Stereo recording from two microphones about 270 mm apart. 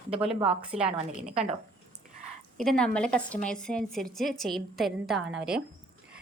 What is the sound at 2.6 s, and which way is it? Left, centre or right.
A woman's voice, centre.